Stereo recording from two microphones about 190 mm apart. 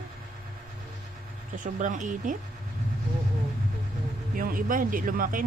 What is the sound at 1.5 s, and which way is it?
Speech, 40° right (ahead or behind).